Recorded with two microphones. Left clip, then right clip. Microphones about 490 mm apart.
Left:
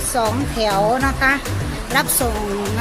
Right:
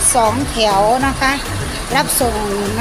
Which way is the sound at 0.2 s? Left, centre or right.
Left.